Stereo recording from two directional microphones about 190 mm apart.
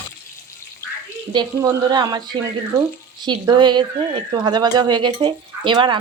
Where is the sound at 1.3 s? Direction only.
20° right (ahead or behind).